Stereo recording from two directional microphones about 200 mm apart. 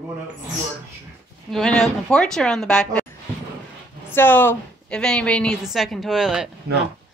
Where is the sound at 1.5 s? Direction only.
5° left (ahead or behind).